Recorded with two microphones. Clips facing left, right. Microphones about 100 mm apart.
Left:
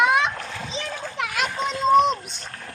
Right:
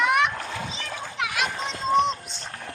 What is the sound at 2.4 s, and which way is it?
Music, 20° right (ahead or behind).